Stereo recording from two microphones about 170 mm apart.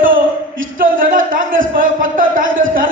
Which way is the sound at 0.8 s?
55° right (ahead or behind).